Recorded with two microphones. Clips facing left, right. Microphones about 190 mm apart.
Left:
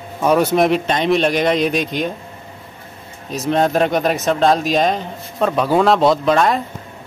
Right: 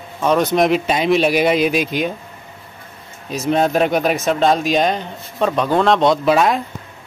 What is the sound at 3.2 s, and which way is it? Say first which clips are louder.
Speech: even; centre (ahead or behind).